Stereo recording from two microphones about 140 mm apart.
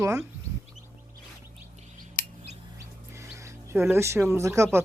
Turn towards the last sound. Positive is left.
turn(degrees=-20)  # may be behind; listen again after turning